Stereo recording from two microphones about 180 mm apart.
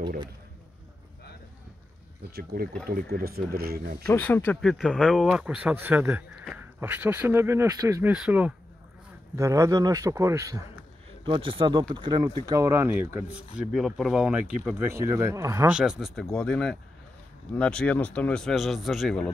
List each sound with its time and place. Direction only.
2.3 s speech: 55° right (ahead or behind)
4.0 s speech: 10° left (ahead or behind); by 8.1 s 20° right (ahead or behind)
8.1 s speech: 5° right (ahead or behind)
11.2 s speech: 30° right (ahead or behind); by 19.3 s 5° left (ahead or behind)